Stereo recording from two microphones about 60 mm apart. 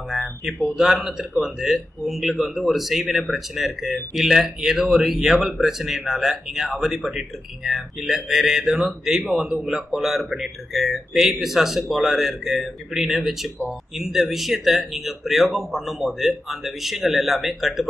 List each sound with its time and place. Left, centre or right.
0.1 s speech: centre